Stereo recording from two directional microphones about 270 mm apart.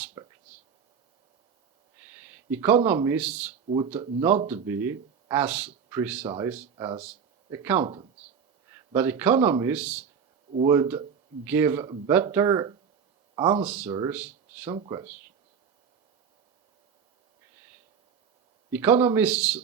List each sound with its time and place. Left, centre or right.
0.0 s whispering: centre
2.0 s speech: centre
18.7 s speech: centre